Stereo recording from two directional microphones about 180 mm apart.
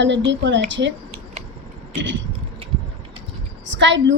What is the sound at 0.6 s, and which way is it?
Speech, 90° right.